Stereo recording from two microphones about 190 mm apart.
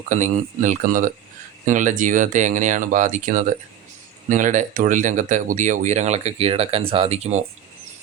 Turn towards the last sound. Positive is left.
turn(degrees=-35)  # may be behind; listen again after turning